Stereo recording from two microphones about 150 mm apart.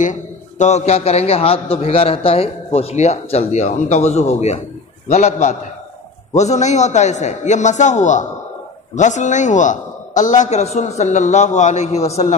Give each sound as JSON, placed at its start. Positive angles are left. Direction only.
{"t": 0.0, "sound": "a man's voice", "side_deg": 55}